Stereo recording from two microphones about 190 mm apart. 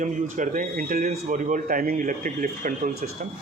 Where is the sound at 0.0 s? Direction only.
40° right (ahead or behind).